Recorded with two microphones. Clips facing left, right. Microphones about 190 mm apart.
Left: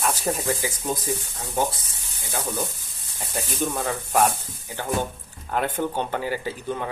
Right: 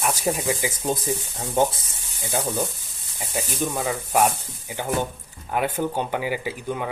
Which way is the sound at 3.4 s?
10° right (ahead or behind).